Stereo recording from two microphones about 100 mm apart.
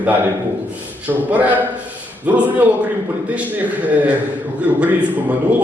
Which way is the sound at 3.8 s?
15° right (ahead or behind).